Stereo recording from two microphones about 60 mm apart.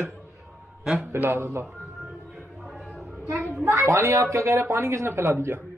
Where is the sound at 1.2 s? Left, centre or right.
Right.